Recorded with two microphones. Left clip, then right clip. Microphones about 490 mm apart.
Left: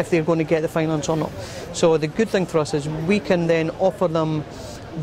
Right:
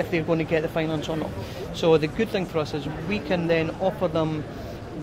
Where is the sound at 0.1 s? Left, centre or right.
Left.